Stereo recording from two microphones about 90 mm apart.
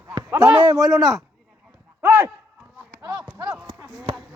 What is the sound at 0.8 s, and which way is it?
Speech, centre (ahead or behind).